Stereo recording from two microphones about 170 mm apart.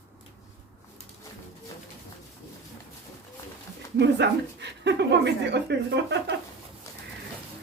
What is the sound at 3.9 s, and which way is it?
A woman's voice, 90° right.